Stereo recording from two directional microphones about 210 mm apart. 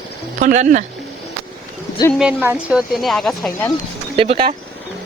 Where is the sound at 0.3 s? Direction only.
35° right (ahead or behind).